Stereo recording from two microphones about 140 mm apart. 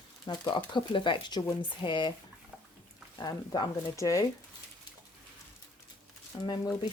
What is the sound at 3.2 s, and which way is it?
Speech, 30° left (ahead or behind).